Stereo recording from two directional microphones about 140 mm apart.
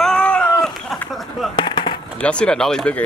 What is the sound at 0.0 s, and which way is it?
Cat, 5° left (ahead or behind).